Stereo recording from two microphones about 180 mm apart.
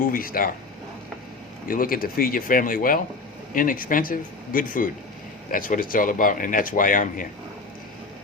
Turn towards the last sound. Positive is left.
turn(degrees=50)  # may be behind; listen again after turning